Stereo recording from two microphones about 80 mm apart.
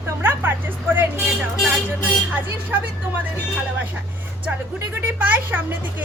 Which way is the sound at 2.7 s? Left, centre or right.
Right.